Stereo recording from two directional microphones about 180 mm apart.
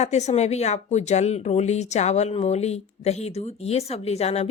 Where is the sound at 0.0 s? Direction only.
40° left (ahead or behind).